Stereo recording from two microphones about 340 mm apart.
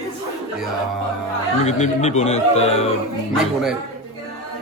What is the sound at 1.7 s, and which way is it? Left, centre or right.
A man's voice, centre.